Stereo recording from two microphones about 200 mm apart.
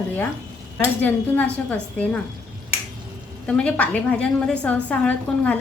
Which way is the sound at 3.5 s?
5° left (ahead or behind).